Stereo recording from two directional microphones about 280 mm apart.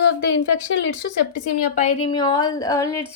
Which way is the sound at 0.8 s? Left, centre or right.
Left.